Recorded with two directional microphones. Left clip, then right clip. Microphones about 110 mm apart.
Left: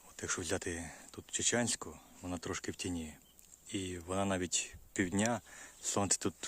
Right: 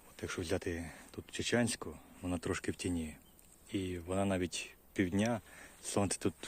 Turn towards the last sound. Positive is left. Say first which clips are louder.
# even
turn(degrees=25)  # may be behind; listen again after turning